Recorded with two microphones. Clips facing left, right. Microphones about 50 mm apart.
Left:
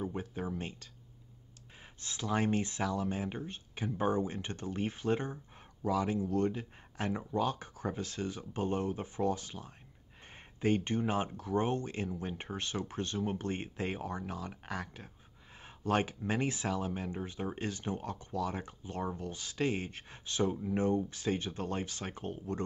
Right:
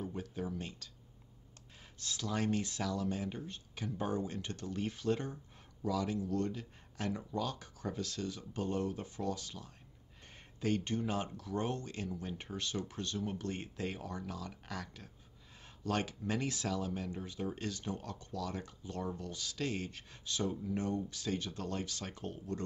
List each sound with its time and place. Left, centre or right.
0.0 s speech: left
2.0 s speech: left